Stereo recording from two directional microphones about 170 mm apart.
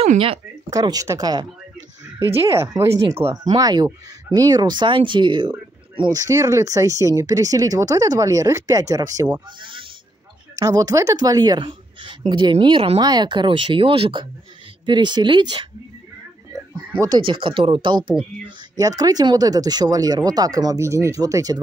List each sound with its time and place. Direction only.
0.0 s speech: 35° right (ahead or behind)
0.7 s speech: 20° right (ahead or behind)
2.5 s speech: 15° right (ahead or behind)
9.6 s a sound: 30° right (ahead or behind)
10.5 s speech: 20° right (ahead or behind)
17.0 s speech: 25° right (ahead or behind)